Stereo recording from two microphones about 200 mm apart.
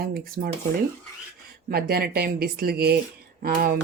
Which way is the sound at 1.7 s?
50° right (ahead or behind).